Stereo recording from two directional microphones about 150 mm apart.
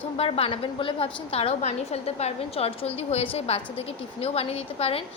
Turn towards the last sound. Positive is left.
turn(degrees=40)  # may be behind; listen again after turning